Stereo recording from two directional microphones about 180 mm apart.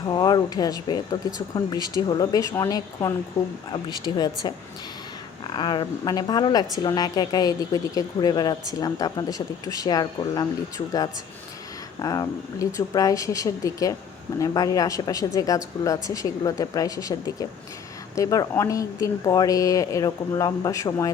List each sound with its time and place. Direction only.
0.1 s a woman's voice: 25° left (ahead or behind)